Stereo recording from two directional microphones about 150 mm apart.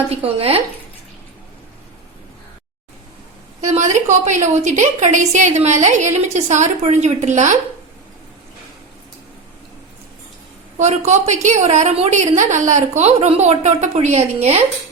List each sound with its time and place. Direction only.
0.1 s speech: 40° right (ahead or behind)
3.6 s a woman's voice: 50° right (ahead or behind)
10.8 s a woman's voice: 50° right (ahead or behind)